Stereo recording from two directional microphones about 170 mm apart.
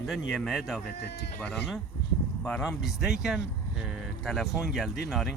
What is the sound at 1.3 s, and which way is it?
Speech, 10° left (ahead or behind).